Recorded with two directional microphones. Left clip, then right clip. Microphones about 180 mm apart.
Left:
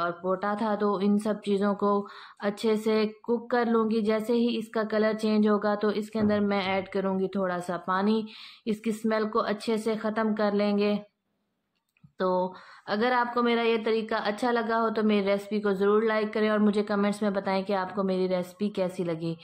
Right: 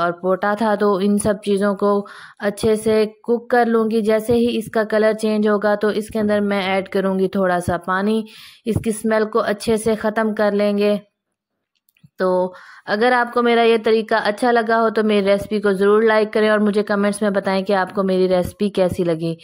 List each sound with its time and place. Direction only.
0.0 s speech: 35° right (ahead or behind)
12.2 s speech: 35° right (ahead or behind)